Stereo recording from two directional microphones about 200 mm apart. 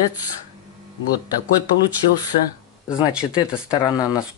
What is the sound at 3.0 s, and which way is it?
Speech, 5° right (ahead or behind).